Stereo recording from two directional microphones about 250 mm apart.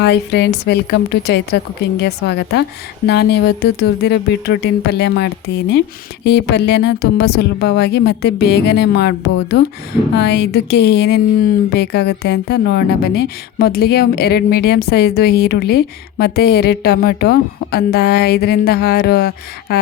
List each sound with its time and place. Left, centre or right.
0.0 s a woman's voice: left